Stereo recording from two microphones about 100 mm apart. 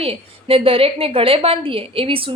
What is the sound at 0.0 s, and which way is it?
A woman's voice, 65° right (ahead or behind).